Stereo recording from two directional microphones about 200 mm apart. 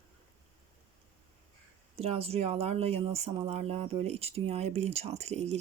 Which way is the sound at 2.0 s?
30° right (ahead or behind).